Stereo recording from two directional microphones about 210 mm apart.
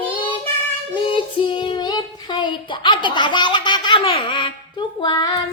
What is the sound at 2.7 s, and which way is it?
Speech, 20° left (ahead or behind).